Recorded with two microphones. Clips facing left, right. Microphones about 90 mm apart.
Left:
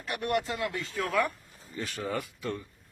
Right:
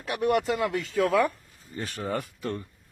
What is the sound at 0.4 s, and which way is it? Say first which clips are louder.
Speech: right 6 dB; 75° right (ahead or behind).